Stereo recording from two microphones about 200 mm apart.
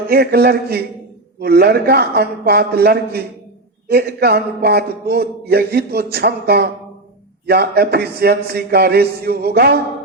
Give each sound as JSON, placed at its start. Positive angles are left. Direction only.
{"t": 0.1, "sound": "a man's voice", "side_deg": -50}